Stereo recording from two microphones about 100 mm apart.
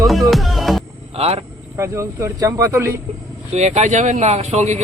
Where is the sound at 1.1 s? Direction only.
90° right.